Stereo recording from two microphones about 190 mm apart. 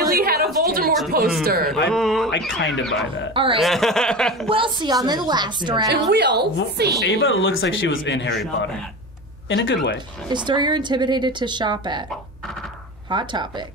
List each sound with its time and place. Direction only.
0.1 s a sound: 50° right (ahead or behind)
1.4 s speech: 55° right (ahead or behind)
1.9 s chuckle: centre (ahead or behind)
2.6 s speech: 70° left (ahead or behind)
3.5 s chuckle: centre (ahead or behind)
4.5 s speech: 25° right (ahead or behind)
5.9 s a woman's voice: 65° right (ahead or behind)
7.1 s speech: 90° left; by 8.4 s 65° left (ahead or behind)
9.5 s speech: 75° left (ahead or behind)
10.3 s speech: 25° right (ahead or behind)
13.1 s speech: 25° right (ahead or behind)